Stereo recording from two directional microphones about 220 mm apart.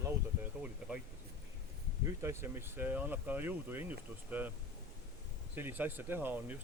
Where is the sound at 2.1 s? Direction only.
10° right (ahead or behind).